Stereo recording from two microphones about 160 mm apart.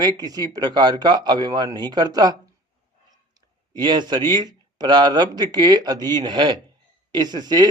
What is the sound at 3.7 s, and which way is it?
A man's voice, 30° right (ahead or behind).